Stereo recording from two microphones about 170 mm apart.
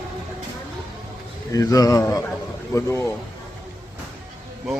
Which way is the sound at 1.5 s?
20° left (ahead or behind).